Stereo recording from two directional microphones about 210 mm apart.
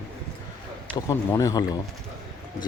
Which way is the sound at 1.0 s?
15° left (ahead or behind).